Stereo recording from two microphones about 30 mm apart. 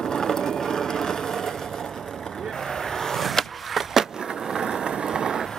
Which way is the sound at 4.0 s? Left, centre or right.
Centre.